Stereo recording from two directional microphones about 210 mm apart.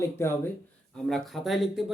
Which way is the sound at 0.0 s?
10° left (ahead or behind).